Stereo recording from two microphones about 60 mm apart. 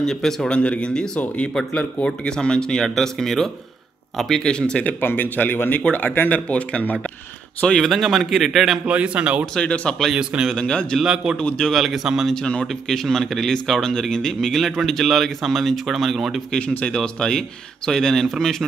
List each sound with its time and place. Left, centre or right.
0.0 s a man's voice: centre
0.6 s a man's voice: centre
5.0 s speech: left
7.8 s speech: centre
8.8 s speech: centre
9.6 s a man's voice: centre
10.1 s a man's voice: centre
10.5 s a man's voice: centre
11.7 s speech: centre
12.4 s a man's voice: centre
12.8 s a man's voice: centre
16.5 s a man's voice: centre